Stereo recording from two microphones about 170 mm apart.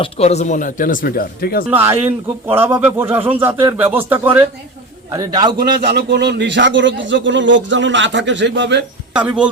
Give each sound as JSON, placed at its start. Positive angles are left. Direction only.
{"t": 0.0, "sound": "speech", "side_deg": 40}
{"t": 1.7, "sound": "a man's voice", "side_deg": -15}
{"t": 3.2, "sound": "speech", "side_deg": -35}
{"t": 3.9, "sound": "a man's voice", "side_deg": -10}
{"t": 5.1, "sound": "a man's voice", "side_deg": -20}
{"t": 5.8, "sound": "a man's voice", "side_deg": -70}
{"t": 9.1, "sound": "a man's voice", "side_deg": -5}